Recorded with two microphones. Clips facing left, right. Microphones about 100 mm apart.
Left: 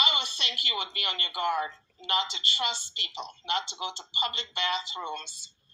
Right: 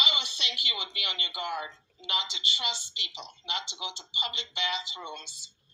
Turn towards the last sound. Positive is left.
turn(degrees=45)  # may be behind; listen again after turning